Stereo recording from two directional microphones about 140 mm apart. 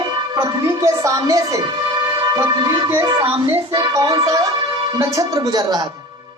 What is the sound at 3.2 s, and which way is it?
Speech, 15° right (ahead or behind).